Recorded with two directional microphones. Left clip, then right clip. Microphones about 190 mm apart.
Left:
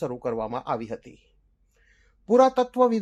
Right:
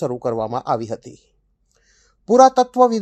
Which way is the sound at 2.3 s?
45° right (ahead or behind).